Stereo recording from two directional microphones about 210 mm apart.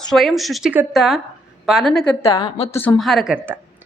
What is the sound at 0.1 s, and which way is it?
A woman's voice, centre (ahead or behind).